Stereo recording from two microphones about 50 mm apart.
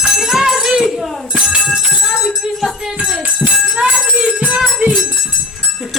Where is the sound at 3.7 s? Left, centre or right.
Centre.